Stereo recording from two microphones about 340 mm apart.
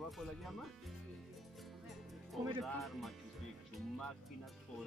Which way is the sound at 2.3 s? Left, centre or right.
Centre.